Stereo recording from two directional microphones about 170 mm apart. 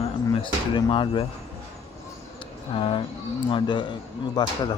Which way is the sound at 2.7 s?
30° left (ahead or behind).